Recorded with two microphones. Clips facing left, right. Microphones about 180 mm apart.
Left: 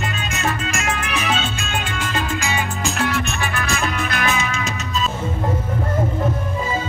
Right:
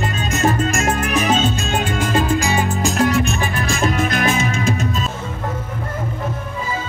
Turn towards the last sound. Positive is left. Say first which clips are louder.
# right 4 dB
turn(degrees=-50)  # may be behind; listen again after turning